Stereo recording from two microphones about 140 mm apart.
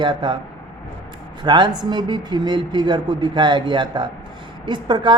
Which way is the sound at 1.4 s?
35° right (ahead or behind).